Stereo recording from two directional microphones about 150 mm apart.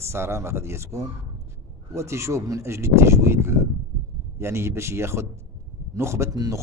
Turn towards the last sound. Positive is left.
turn(degrees=-25)  # may be behind; listen again after turning